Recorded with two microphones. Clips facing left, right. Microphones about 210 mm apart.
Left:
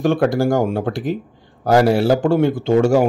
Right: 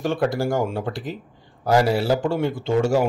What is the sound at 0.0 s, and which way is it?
A man's voice, 50° left (ahead or behind).